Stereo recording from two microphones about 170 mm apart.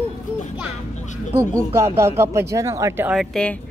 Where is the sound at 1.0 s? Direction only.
45° left (ahead or behind).